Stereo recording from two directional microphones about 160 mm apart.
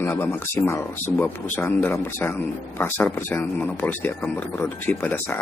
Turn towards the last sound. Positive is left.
turn(degrees=10)  # may be behind; listen again after turning